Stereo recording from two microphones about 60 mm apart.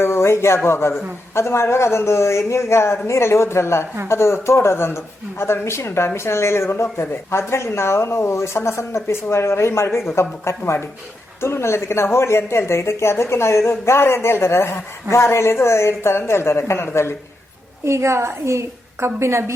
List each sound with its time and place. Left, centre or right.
0.0 s a woman's voice: left
17.8 s a woman's voice: right